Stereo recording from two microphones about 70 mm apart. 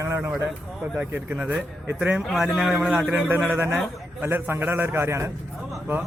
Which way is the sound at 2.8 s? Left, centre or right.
Centre.